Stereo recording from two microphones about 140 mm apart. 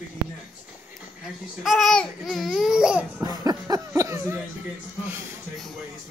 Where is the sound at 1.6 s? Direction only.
Centre (ahead or behind).